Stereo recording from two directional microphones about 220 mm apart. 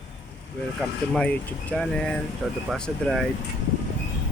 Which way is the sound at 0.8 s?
5° left (ahead or behind).